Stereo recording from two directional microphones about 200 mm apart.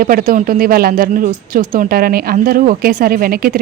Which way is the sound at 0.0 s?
45° right (ahead or behind).